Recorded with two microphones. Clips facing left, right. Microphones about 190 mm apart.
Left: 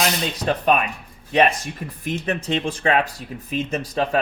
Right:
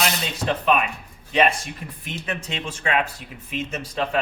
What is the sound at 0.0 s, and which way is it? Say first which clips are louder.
Speech: left 2 dB; 45° left (ahead or behind).